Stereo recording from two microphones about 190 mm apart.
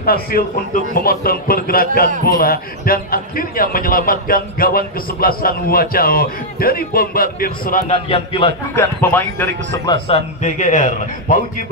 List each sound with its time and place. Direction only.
0.0 s a man's voice: 50° left (ahead or behind)
7.9 s a man's voice: 30° left (ahead or behind)
8.7 s speech: 10° left (ahead or behind)
10.0 s a man's voice: 35° left (ahead or behind)